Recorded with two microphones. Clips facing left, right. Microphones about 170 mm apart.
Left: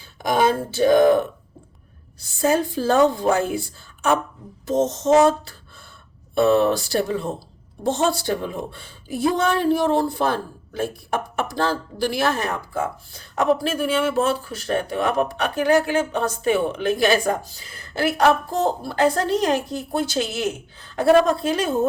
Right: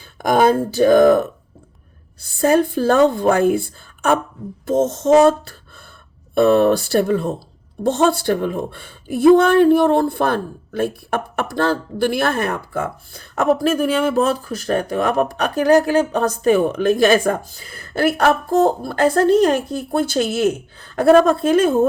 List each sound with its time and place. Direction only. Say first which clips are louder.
0.0 s a woman's voice: right 5 dB; 50° right (ahead or behind)
2.2 s a woman's voice: right 5 dB; 55° right (ahead or behind)